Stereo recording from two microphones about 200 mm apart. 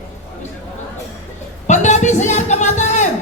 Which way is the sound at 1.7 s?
35° left (ahead or behind).